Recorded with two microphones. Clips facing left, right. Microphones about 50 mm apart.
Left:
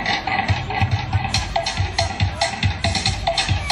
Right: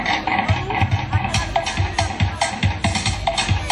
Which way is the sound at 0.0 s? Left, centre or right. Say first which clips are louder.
Right 1 dB; right.